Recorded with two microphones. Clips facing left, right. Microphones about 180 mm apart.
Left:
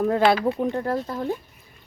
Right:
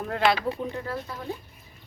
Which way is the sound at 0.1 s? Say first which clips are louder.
Left 5 dB; 45° left (ahead or behind).